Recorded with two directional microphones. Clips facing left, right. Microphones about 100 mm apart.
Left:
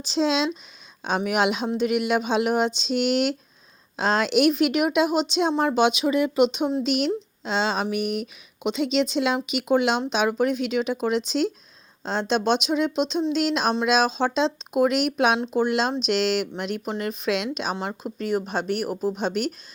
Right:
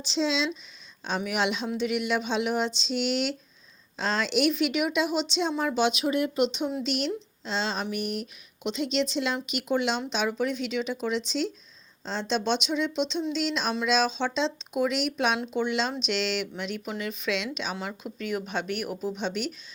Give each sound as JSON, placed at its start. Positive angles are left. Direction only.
{"t": 0.0, "sound": "speech", "side_deg": 50}
{"t": 6.8, "sound": "speech", "side_deg": 55}